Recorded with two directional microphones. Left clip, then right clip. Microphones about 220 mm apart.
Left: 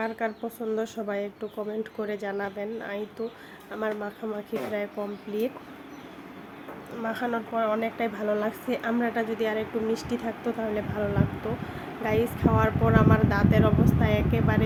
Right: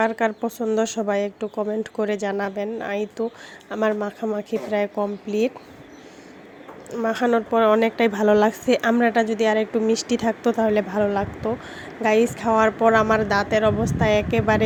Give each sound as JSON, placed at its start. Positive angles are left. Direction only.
{"t": 0.0, "sound": "speech", "side_deg": -40}
{"t": 6.9, "sound": "speech", "side_deg": -30}